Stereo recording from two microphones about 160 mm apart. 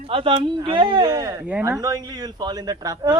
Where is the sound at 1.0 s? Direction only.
20° right (ahead or behind).